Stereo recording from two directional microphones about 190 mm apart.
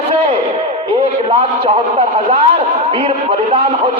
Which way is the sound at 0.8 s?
30° right (ahead or behind).